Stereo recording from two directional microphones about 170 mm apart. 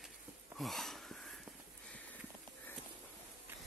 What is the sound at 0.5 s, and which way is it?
Wheeze, centre (ahead or behind).